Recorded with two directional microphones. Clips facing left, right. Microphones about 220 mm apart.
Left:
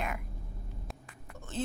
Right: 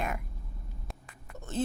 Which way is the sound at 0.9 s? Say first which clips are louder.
Right 1 dB; centre (ahead or behind).